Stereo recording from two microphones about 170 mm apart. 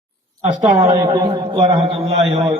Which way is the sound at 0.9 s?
25° right (ahead or behind).